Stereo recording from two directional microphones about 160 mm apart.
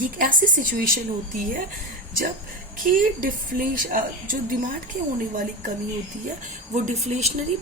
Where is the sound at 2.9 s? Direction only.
55° right (ahead or behind).